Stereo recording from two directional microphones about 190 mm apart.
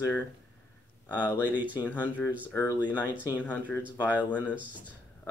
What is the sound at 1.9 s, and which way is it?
Speech, 10° left (ahead or behind).